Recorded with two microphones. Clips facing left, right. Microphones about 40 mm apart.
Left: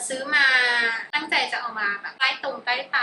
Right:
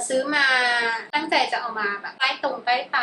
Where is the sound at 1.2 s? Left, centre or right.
Left.